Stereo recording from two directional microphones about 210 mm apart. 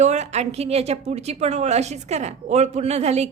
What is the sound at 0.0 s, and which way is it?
A woman's voice, 35° right (ahead or behind).